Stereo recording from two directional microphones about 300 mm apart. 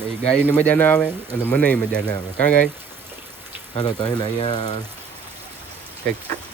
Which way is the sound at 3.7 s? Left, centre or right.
Centre.